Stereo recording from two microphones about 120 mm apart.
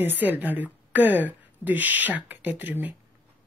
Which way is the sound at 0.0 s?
15° right (ahead or behind).